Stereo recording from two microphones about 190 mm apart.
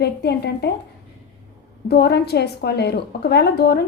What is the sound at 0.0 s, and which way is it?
Speech, 60° left (ahead or behind).